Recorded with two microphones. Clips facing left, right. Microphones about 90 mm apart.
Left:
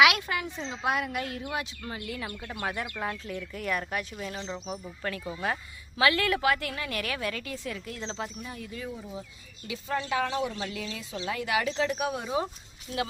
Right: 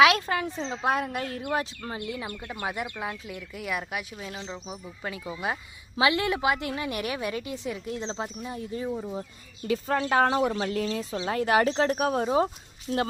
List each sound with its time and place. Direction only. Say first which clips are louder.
0.0 s speech: right 3 dB; 35° right (ahead or behind)
2.4 s a woman's voice: left 1 dB; 10° right (ahead or behind); by 9.1 s 30° right (ahead or behind)
9.6 s speech: right 6 dB; 50° right (ahead or behind)